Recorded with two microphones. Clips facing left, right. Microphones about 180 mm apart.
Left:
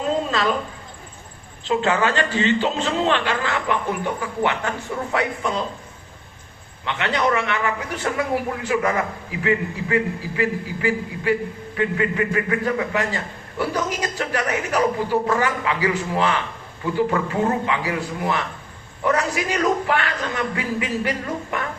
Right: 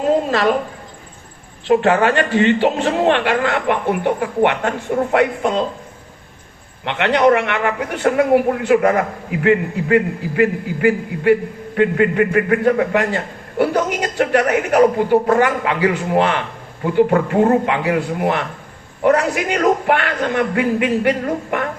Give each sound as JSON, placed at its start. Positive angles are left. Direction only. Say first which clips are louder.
{"t": 0.0, "sound": "a sound", "louder": "right 6 dB", "side_deg": -55}
{"t": 1.6, "sound": "a man's voice", "louder": "right 6 dB", "side_deg": -60}
{"t": 6.8, "sound": "a man's voice", "louder": "right 8 dB", "side_deg": -60}